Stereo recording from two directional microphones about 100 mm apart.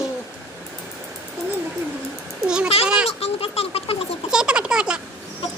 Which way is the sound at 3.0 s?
90° left.